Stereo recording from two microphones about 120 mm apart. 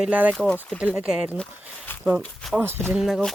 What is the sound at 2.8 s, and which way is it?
Speech, centre (ahead or behind).